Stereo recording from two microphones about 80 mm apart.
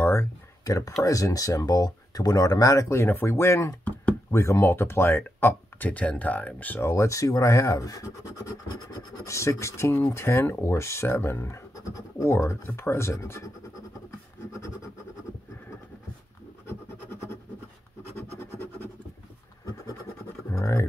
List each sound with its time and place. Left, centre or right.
0.0 s a sound: left
0.7 s speech: left
6.9 s speech: left
16.6 s scratch: left
20.5 s speech: left